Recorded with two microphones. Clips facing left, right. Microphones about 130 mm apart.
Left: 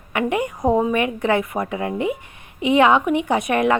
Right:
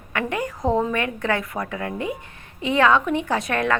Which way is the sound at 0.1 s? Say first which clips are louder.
Left 4 dB; 20° left (ahead or behind).